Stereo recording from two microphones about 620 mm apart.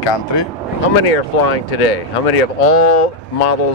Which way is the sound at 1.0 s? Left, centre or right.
Left.